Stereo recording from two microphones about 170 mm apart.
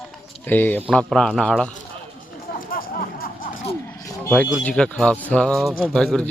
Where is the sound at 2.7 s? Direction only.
55° left (ahead or behind).